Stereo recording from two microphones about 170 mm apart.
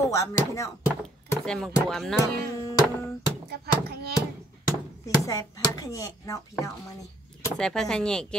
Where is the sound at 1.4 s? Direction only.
5° left (ahead or behind).